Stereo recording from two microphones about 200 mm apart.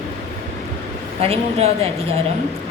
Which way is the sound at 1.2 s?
30° right (ahead or behind).